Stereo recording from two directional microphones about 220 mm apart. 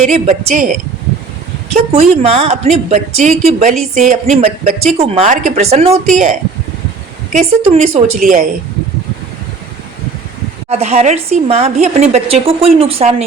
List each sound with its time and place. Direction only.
0.0 s a woman's voice: 30° right (ahead or behind)
1.9 s a woman's voice: 30° right (ahead or behind)
7.3 s a woman's voice: 30° right (ahead or behind)
10.7 s a woman's voice: 30° right (ahead or behind)